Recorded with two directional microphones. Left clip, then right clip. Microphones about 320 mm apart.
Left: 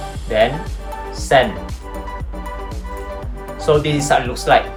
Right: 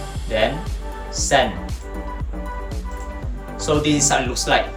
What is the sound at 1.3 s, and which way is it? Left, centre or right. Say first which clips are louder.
Speech: left 4 dB; left.